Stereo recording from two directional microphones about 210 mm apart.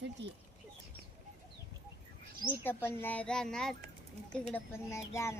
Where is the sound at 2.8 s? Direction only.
10° left (ahead or behind).